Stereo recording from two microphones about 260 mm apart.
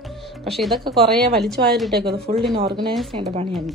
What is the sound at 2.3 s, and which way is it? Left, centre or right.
Speech, right.